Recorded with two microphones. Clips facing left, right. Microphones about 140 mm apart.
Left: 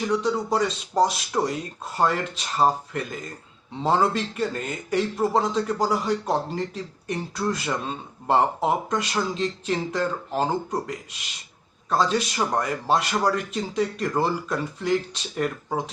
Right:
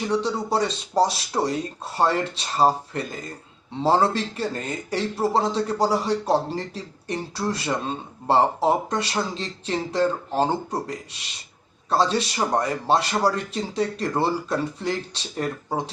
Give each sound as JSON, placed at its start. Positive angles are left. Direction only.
{"t": 0.1, "sound": "speech", "side_deg": -30}